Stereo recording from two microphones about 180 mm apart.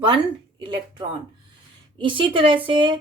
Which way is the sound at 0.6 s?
25° right (ahead or behind).